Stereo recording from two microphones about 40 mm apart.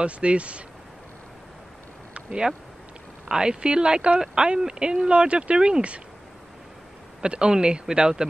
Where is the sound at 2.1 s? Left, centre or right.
Right.